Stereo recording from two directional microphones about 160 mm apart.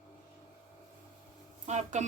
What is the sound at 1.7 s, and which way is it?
Speech, 45° right (ahead or behind).